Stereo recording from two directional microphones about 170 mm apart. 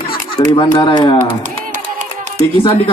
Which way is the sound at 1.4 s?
50° right (ahead or behind).